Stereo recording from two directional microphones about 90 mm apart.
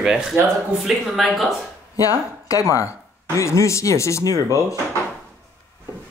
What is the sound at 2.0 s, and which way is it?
Speech, 40° left (ahead or behind).